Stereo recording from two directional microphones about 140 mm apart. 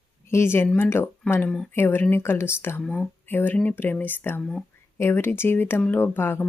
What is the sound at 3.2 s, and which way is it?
Speech, 15° left (ahead or behind).